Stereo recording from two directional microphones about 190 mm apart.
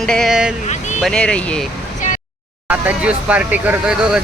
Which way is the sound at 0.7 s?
35° left (ahead or behind).